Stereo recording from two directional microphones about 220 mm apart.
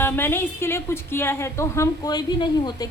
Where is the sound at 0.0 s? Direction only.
10° left (ahead or behind).